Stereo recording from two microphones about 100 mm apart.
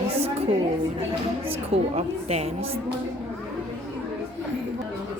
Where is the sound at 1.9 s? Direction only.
90° right.